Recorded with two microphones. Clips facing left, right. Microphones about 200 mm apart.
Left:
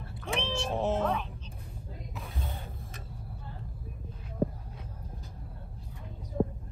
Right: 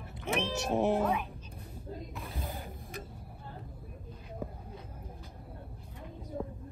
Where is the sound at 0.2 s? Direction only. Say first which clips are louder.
Right 1 dB; 15° right (ahead or behind).